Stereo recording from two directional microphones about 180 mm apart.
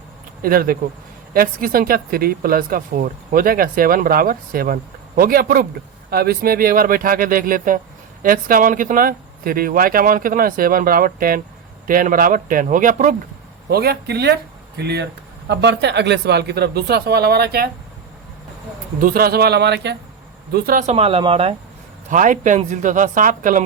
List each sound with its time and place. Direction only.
0.4 s speech: 55° right (ahead or behind)
13.7 s speech: 60° right (ahead or behind)
18.9 s speech: 50° right (ahead or behind); by 20.0 s 70° right (ahead or behind)
20.5 s speech: 55° right (ahead or behind)
20.9 s speech: 30° right (ahead or behind)
22.1 s speech: 45° right (ahead or behind)